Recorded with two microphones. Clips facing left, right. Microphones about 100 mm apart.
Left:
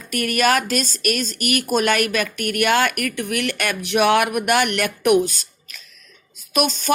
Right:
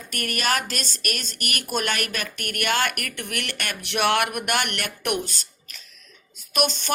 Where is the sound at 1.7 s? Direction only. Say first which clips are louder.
Left 7 dB; 50° left (ahead or behind).